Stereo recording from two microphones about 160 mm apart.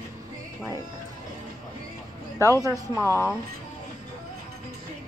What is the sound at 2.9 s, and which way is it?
Speech, 15° left (ahead or behind).